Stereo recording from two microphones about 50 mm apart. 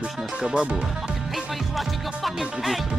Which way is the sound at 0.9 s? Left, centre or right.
Centre.